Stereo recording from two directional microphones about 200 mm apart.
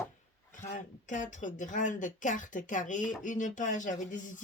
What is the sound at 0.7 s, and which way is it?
Speech, 40° left (ahead or behind).